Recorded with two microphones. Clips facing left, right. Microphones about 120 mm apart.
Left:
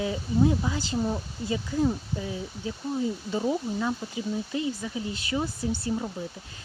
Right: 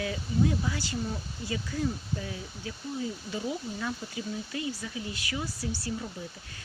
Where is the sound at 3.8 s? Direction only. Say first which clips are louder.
Left 5 dB; 25° left (ahead or behind).